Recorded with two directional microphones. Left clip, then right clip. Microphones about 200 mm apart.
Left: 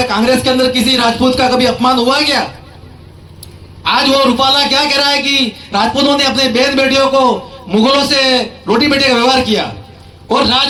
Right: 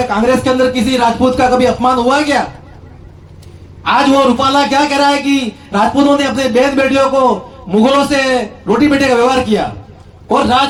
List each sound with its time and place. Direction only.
0.0 s a man's voice: 55° right (ahead or behind)
3.8 s a man's voice: 50° right (ahead or behind)